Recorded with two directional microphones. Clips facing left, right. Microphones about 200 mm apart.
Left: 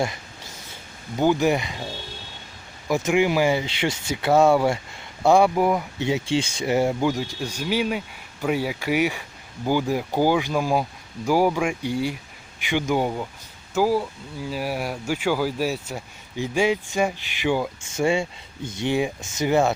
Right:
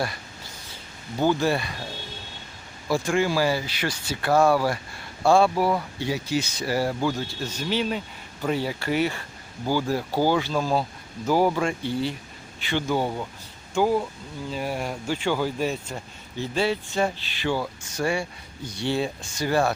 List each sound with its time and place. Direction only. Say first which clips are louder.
1.1 s speech: left 3 dB; 15° left (ahead or behind)
2.9 s speech: left 3 dB; 20° left (ahead or behind)